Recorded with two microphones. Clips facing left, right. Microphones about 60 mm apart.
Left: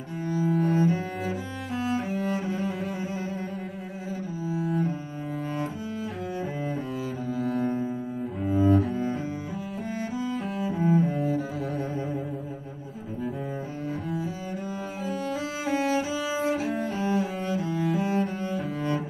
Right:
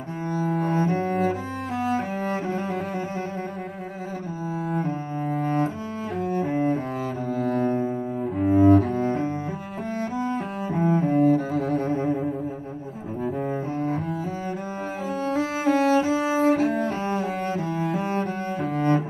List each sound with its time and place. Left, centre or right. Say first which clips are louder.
0.3 s cello: even; right
4.6 s cello: right 3 dB; right
15.2 s cello: right 10 dB; right